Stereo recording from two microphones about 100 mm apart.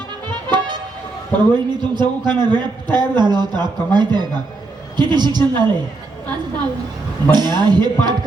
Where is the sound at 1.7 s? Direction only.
45° right (ahead or behind).